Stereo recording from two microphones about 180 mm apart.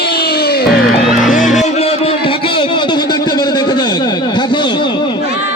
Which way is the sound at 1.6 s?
35° left (ahead or behind).